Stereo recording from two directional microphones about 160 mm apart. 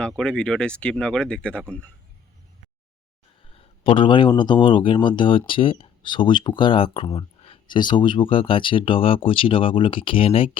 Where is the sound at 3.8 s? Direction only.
35° left (ahead or behind).